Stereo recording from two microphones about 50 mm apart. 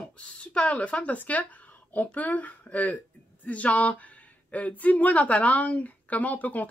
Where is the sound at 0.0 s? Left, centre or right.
Left.